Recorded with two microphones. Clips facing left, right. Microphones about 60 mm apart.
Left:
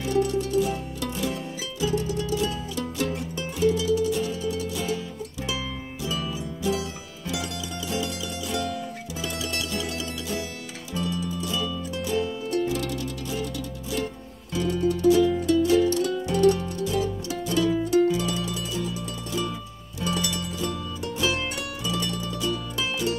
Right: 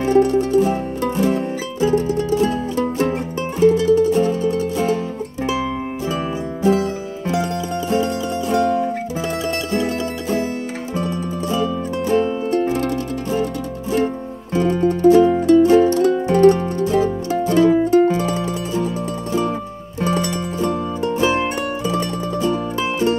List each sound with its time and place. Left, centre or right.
0.0 s music: right
6.6 s music: right
11.0 s music: right
14.5 s music: right
20.0 s music: right